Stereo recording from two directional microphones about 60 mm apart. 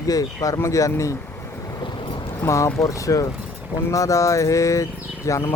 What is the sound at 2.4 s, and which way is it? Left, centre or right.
Speech, left.